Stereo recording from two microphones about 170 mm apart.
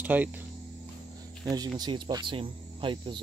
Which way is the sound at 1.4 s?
20° right (ahead or behind).